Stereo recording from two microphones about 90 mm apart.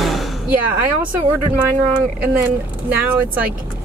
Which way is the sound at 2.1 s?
20° right (ahead or behind).